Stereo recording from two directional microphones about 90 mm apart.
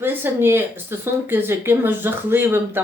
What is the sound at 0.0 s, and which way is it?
A woman's voice, 25° right (ahead or behind).